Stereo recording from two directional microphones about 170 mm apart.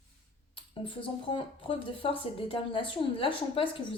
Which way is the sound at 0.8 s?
30° left (ahead or behind).